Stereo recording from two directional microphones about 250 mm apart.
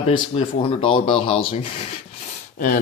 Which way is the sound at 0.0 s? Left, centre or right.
Left.